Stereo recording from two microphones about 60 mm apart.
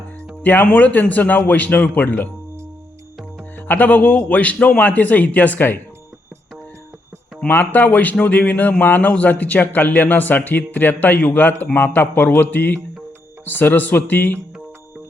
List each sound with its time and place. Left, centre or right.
0.4 s a man's voice: left
3.7 s a man's voice: left
7.4 s a man's voice: left